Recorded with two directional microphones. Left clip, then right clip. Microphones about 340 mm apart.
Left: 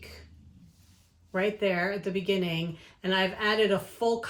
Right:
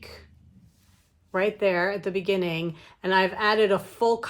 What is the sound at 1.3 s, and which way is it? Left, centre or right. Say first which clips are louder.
A woman's voice: right 4 dB; centre.